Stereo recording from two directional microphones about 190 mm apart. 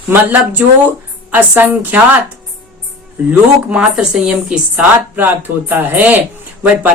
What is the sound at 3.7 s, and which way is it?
Speech, 5° right (ahead or behind).